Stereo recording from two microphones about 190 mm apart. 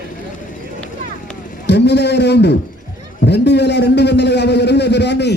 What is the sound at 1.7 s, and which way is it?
A man's voice, 65° left (ahead or behind).